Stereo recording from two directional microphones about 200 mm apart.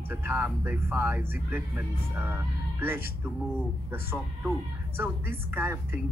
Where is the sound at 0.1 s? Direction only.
10° right (ahead or behind).